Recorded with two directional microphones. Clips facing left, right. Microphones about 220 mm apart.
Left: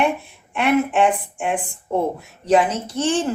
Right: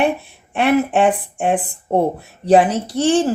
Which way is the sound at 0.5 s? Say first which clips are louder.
Right 3 dB; 35° right (ahead or behind).